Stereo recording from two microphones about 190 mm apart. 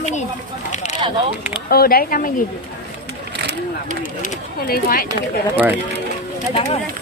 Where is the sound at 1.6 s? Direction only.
50° left (ahead or behind).